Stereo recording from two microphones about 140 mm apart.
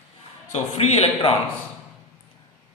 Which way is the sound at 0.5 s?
50° left (ahead or behind).